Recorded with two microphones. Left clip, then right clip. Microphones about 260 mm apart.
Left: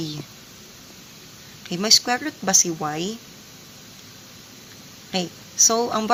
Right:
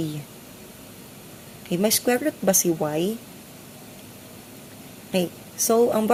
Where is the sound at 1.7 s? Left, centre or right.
Centre.